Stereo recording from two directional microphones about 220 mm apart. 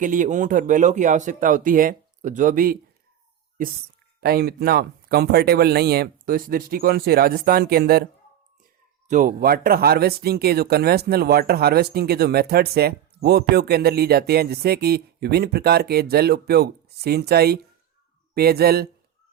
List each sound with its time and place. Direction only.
0.0 s speech: 35° right (ahead or behind)
4.2 s speech: 45° right (ahead or behind)
9.0 s speech: 35° right (ahead or behind)